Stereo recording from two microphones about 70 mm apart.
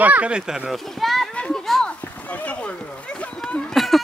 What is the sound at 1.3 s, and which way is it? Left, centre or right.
Children playing, centre.